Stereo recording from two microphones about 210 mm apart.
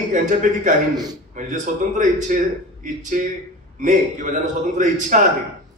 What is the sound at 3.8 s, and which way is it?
A man's voice, 35° right (ahead or behind).